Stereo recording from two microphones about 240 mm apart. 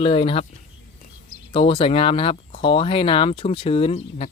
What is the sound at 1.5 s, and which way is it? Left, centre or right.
Speech, left.